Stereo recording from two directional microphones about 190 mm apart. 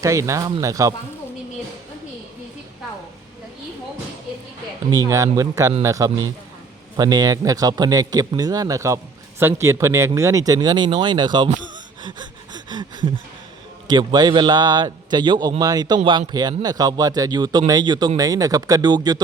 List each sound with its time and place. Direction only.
0.0 s speech: 15° right (ahead or behind)
4.9 s speech: 20° right (ahead or behind)
12.0 s gasp: 25° right (ahead or behind)
13.8 s speech: 25° right (ahead or behind)